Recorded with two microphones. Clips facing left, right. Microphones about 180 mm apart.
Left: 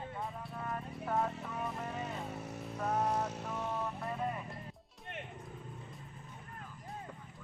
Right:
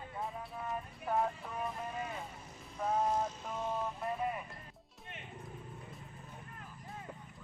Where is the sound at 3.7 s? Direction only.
15° right (ahead or behind).